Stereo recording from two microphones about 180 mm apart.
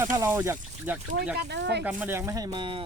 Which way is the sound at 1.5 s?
70° right (ahead or behind).